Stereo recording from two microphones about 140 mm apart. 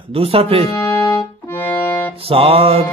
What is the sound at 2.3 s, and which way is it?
Music, 40° right (ahead or behind).